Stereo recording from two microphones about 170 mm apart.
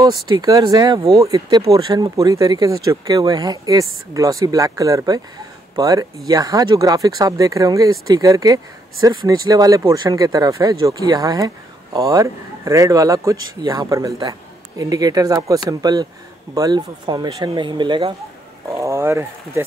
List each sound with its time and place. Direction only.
0.0 s speech: 25° right (ahead or behind)
18.7 s speech: 15° right (ahead or behind)